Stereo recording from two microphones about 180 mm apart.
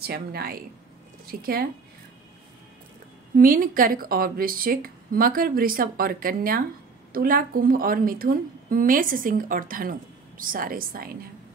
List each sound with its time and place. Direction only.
0.0 s a woman's voice: 60° right (ahead or behind)
3.3 s a woman's voice: 50° right (ahead or behind)